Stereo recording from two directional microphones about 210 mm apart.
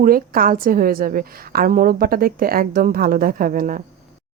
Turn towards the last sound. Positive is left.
turn(degrees=-40)  # may be behind; listen again after turning